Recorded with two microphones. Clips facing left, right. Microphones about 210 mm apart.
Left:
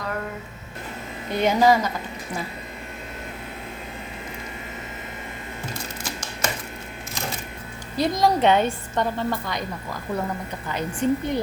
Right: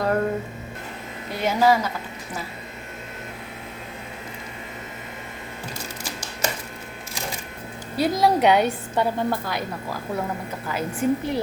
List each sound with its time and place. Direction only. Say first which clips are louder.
0.0 s a sound: right 8 dB; 40° right (ahead or behind)
1.4 s a woman's voice: left 1 dB; 5° right (ahead or behind)
6.1 s typewriter: right 1 dB; 10° right (ahead or behind)
8.2 s a woman's voice: right 1 dB; 10° right (ahead or behind)